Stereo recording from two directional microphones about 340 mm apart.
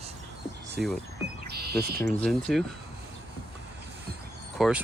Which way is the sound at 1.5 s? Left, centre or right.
Right.